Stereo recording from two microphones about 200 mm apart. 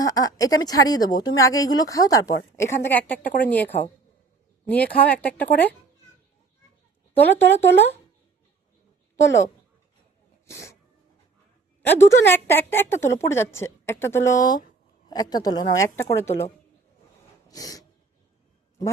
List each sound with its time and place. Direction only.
0.0 s a woman's voice: 15° left (ahead or behind)
7.2 s a woman's voice: 10° left (ahead or behind)
10.4 s speech: 15° left (ahead or behind)
11.9 s a woman's voice: 10° left (ahead or behind)
17.5 s a sound: 20° left (ahead or behind)